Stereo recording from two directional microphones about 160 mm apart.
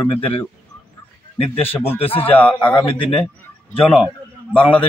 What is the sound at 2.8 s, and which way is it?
Speech, 30° left (ahead or behind).